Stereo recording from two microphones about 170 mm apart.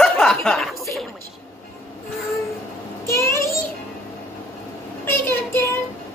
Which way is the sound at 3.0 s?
15° left (ahead or behind).